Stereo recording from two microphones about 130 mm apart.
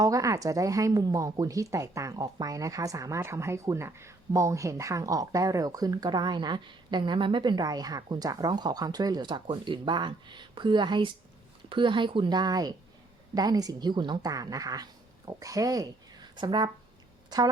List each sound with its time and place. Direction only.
0.0 s a woman's voice: 25° right (ahead or behind)